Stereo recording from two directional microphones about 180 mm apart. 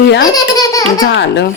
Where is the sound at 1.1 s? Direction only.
80° left.